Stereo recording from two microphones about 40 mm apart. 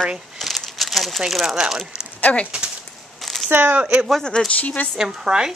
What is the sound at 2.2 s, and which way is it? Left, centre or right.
Speech, left.